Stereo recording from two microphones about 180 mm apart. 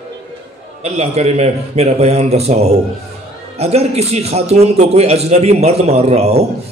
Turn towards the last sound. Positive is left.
turn(degrees=-35)  # may be behind; listen again after turning